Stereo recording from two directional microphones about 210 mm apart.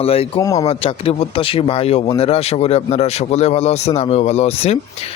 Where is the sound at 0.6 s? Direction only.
25° left (ahead or behind).